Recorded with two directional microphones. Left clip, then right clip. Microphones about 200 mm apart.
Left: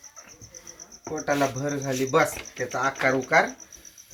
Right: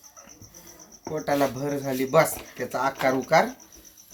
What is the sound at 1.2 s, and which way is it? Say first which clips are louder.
Speech: even; 45° right (ahead or behind).